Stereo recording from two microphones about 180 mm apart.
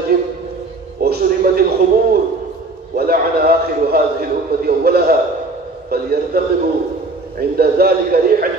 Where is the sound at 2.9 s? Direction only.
60° right (ahead or behind).